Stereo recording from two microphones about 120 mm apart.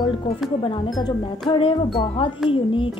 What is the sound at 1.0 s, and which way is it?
A woman's voice, 45° left (ahead or behind).